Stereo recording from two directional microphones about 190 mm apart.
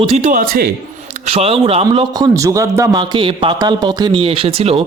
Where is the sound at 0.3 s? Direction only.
50° right (ahead or behind).